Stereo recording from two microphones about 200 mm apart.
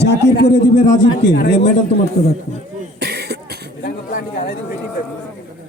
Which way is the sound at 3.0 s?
55° right (ahead or behind).